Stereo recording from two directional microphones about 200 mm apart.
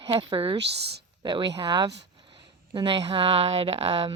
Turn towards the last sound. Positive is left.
turn(degrees=-30)  # may be behind; listen again after turning